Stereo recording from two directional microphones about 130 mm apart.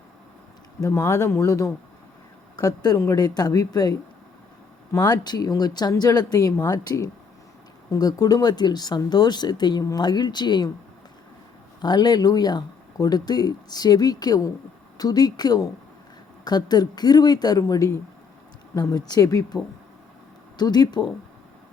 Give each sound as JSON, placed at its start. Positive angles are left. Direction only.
{"t": 0.8, "sound": "speech", "side_deg": 20}
{"t": 11.8, "sound": "speech", "side_deg": 30}
{"t": 20.6, "sound": "speech", "side_deg": 30}